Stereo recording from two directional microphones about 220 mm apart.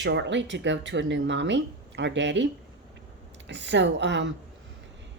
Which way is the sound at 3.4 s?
55° right (ahead or behind).